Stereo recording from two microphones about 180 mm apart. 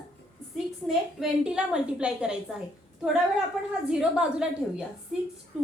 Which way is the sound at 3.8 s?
5° right (ahead or behind).